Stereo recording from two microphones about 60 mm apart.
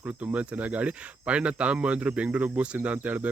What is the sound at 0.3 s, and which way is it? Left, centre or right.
Speech, right.